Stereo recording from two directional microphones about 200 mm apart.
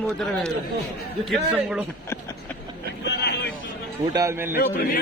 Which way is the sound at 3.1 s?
55° left (ahead or behind).